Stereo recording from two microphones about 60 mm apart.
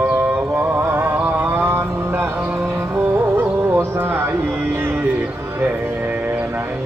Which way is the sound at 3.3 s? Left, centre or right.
Right.